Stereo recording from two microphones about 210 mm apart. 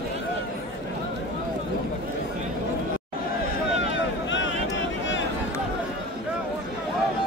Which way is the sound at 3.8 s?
60° left (ahead or behind).